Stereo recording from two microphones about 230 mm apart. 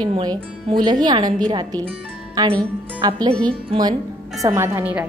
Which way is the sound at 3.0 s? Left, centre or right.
Centre.